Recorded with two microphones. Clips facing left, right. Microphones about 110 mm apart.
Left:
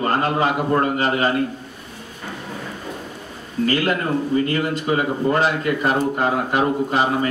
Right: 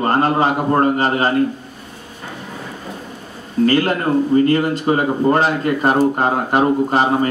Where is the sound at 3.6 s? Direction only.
40° right (ahead or behind).